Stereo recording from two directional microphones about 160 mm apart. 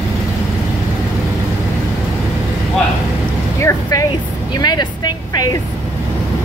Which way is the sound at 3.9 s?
25° left (ahead or behind).